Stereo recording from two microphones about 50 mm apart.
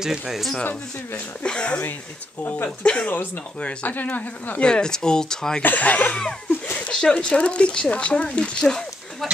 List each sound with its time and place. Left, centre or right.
0.0 s speech: centre
1.4 s speech: centre
2.8 s speech: left
4.6 s speech: centre
5.6 s speech: left
6.9 s speech: centre